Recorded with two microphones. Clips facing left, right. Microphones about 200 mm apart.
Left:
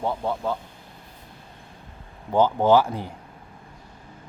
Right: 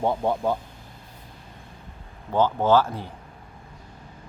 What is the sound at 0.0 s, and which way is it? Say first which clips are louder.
Speech: right 3 dB; 20° right (ahead or behind).